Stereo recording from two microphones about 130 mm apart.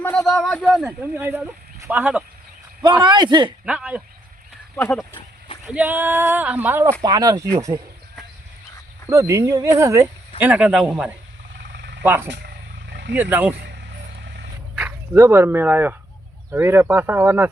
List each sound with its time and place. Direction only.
0.0 s speech: 5° left (ahead or behind)
0.9 s speech: 15° right (ahead or behind)
3.0 s speech: 35° right (ahead or behind)
3.7 s speech: 10° right (ahead or behind)
5.6 s speech: 10° right (ahead or behind)
7.0 s speech: 30° right (ahead or behind)
9.0 s speech: 25° right (ahead or behind)
10.4 s speech: 5° right (ahead or behind)
15.1 s speech: 20° right (ahead or behind)